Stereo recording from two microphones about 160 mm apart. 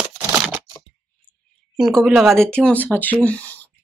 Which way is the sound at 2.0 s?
Centre (ahead or behind).